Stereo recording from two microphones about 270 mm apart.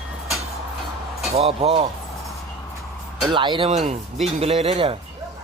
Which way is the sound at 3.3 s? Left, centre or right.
Centre.